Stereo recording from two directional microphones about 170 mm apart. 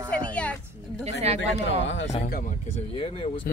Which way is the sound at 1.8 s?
90° left.